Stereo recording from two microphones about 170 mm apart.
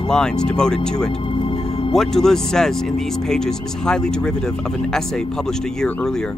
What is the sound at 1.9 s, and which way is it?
Speech, centre (ahead or behind).